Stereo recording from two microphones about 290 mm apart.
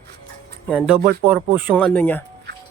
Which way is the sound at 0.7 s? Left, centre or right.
Centre.